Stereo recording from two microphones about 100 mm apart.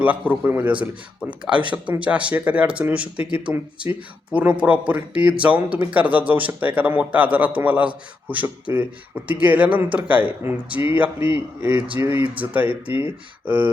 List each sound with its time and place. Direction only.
0.0 s speech: 15° right (ahead or behind)